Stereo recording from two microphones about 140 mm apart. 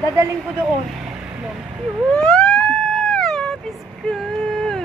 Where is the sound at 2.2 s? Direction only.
5° left (ahead or behind).